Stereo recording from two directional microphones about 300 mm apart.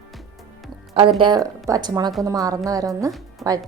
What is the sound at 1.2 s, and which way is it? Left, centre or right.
A woman's voice, centre.